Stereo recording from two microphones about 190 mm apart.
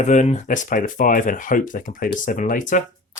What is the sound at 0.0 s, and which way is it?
Speech, 40° left (ahead or behind).